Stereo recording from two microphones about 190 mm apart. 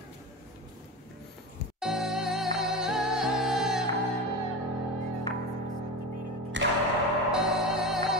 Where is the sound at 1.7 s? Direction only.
Centre (ahead or behind).